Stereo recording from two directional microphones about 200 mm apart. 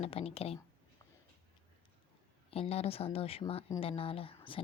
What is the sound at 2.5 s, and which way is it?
Speech, 30° left (ahead or behind).